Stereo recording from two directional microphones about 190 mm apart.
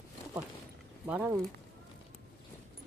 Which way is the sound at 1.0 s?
10° right (ahead or behind).